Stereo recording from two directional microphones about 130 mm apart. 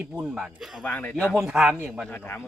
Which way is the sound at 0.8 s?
15° left (ahead or behind).